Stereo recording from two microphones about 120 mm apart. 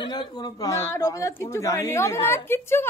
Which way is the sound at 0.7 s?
25° left (ahead or behind).